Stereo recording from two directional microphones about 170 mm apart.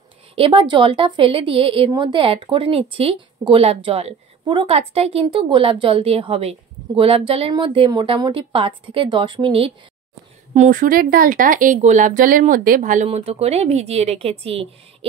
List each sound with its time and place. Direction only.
0.4 s a woman's voice: 30° right (ahead or behind)
10.5 s speech: 50° right (ahead or behind)